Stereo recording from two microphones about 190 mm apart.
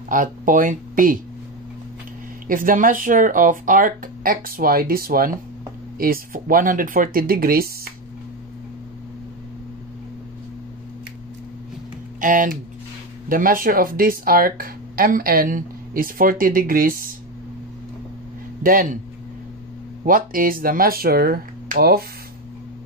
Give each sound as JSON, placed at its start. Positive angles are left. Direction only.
{"t": 0.1, "sound": "speech", "side_deg": -45}
{"t": 2.4, "sound": "speech", "side_deg": -45}
{"t": 12.2, "sound": "speech", "side_deg": -45}
{"t": 18.6, "sound": "speech", "side_deg": -50}
{"t": 20.1, "sound": "speech", "side_deg": -50}